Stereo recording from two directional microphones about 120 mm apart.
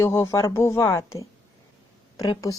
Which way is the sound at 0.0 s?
25° left (ahead or behind).